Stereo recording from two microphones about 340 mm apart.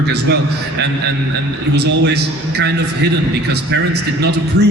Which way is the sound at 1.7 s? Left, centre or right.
Right.